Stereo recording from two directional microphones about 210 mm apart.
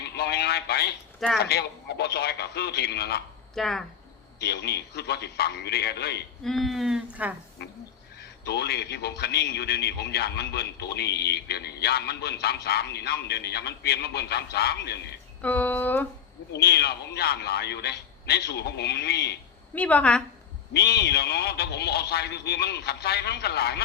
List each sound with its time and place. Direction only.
0.0 s a sound: 50° left (ahead or behind)
1.4 s a man's voice: 50° left (ahead or behind)
3.5 s speech: centre (ahead or behind)
4.4 s a man's voice: 50° left (ahead or behind)
6.4 s speech: centre (ahead or behind)
8.2 s a man's voice: 50° left (ahead or behind)
15.4 s speech: 5° left (ahead or behind)
16.5 s a man's voice: 50° left (ahead or behind)
19.7 s speech: 5° left (ahead or behind)
20.7 s a man's voice: 50° left (ahead or behind)